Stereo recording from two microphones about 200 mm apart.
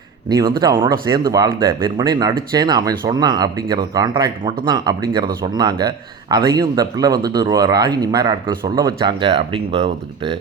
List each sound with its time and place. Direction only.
0.3 s a man's voice: 20° right (ahead or behind)